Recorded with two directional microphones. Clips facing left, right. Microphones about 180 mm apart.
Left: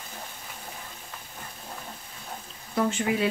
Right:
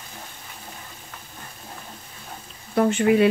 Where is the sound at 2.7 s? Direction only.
60° right (ahead or behind).